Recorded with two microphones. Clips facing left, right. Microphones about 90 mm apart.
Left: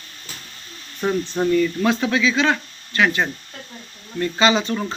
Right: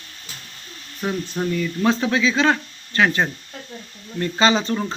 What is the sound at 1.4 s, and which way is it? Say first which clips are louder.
Speech: left 4 dB; 5° left (ahead or behind).